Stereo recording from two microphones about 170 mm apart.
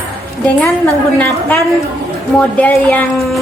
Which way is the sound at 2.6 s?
10° left (ahead or behind).